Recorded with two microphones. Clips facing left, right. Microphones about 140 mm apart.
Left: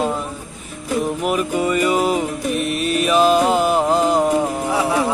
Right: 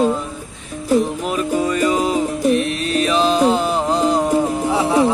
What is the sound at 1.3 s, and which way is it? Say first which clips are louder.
Music: even; 5° left (ahead or behind).